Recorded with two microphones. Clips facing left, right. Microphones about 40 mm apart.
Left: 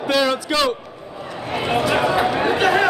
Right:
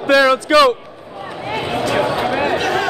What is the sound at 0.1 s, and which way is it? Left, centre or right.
Speech, right.